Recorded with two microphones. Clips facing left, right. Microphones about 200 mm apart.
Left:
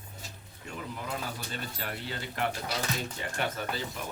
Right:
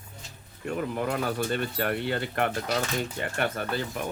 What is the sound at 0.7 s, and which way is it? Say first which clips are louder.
Speech: right 9 dB; 60° right (ahead or behind).